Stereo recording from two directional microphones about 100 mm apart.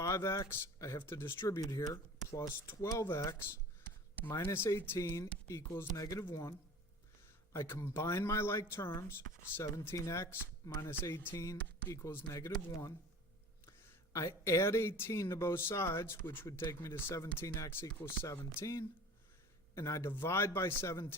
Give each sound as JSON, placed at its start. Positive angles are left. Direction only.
{"t": 0.0, "sound": "speech", "side_deg": 30}
{"t": 1.5, "sound": "speech", "side_deg": 35}
{"t": 4.4, "sound": "speech", "side_deg": 30}
{"t": 7.5, "sound": "speech", "side_deg": 30}
{"t": 14.1, "sound": "speech", "side_deg": 30}